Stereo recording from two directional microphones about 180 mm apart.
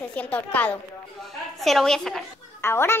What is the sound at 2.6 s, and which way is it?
Speech, 15° left (ahead or behind).